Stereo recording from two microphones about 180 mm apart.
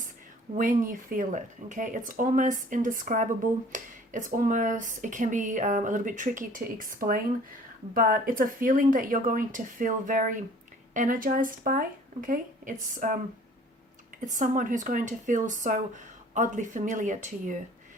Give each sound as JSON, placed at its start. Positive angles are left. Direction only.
{"t": 0.5, "sound": "speech", "side_deg": -45}
{"t": 14.3, "sound": "speech", "side_deg": -45}